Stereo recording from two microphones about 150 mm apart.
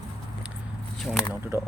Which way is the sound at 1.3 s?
15° right (ahead or behind).